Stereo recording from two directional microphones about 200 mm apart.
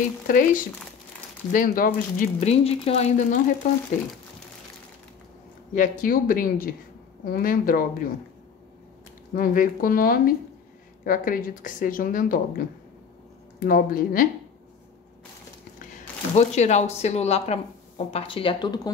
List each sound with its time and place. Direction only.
0.3 s a woman's voice: 45° left (ahead or behind)
5.8 s a woman's voice: 45° left (ahead or behind)
9.3 s a woman's voice: 45° left (ahead or behind)
13.7 s a woman's voice: 45° left (ahead or behind)
15.8 s speech: 35° left (ahead or behind)